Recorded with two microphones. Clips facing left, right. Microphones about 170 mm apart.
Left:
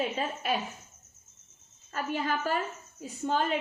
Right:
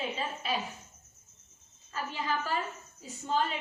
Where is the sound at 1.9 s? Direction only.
50° left (ahead or behind).